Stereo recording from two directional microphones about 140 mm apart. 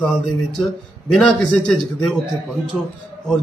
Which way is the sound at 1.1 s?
5° left (ahead or behind).